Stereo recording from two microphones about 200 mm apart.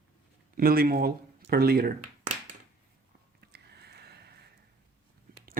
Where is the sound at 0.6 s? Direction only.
50° right (ahead or behind).